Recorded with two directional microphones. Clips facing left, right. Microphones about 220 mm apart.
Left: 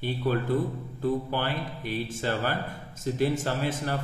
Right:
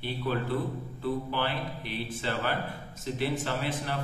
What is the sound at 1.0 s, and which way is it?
A man's voice, 45° left (ahead or behind).